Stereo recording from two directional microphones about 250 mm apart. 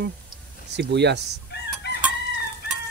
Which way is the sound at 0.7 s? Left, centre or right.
Right.